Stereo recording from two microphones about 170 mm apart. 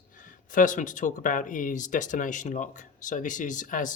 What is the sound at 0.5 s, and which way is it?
Speech, 50° left (ahead or behind).